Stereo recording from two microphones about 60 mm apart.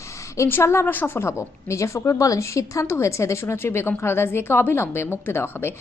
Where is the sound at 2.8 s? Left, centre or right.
Left.